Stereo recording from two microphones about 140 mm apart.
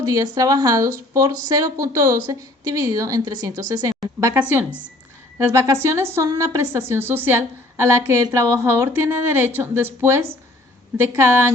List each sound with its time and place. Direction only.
0.0 s a woman's voice: 25° right (ahead or behind)